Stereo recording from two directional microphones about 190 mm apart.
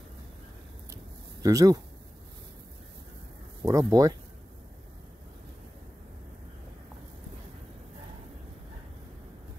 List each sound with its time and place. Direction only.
1.4 s speech: 20° right (ahead or behind)
3.6 s speech: 15° right (ahead or behind)